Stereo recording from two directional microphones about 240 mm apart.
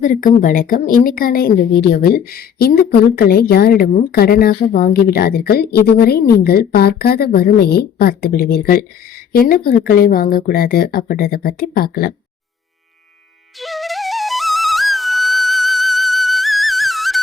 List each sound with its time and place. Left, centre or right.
0.0 s speech: left
13.6 s flute: centre